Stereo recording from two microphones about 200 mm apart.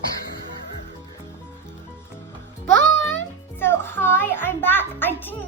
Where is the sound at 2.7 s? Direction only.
70° right (ahead or behind).